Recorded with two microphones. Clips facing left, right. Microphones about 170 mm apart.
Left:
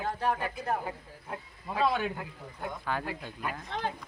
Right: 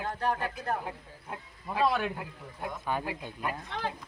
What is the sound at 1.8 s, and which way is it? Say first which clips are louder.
Speech: right 1 dB; centre (ahead or behind).